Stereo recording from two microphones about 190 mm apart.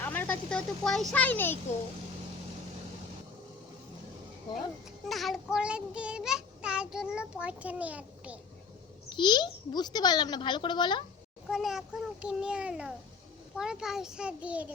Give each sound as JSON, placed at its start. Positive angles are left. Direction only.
{"t": 0.0, "sound": "speech", "side_deg": 10}
{"t": 5.0, "sound": "child singing", "side_deg": 0}
{"t": 9.0, "sound": "a child's voice", "side_deg": 25}
{"t": 11.4, "sound": "child singing", "side_deg": 0}